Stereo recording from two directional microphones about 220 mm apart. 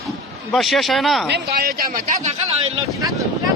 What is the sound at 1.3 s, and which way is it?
Speech, 45° right (ahead or behind).